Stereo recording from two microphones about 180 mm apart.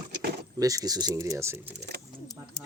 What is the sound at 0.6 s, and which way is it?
Speech, 20° right (ahead or behind).